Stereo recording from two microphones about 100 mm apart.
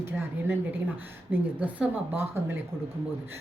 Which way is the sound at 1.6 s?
15° right (ahead or behind).